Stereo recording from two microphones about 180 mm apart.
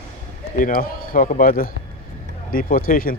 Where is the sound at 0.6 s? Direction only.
50° left (ahead or behind).